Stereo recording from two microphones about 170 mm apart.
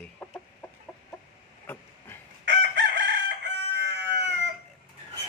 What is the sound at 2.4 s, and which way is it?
Chicken, 90° right.